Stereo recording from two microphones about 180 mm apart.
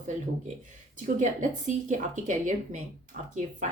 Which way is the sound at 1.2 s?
45° right (ahead or behind).